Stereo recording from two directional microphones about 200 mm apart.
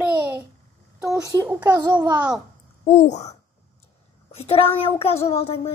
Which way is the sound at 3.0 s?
35° left (ahead or behind).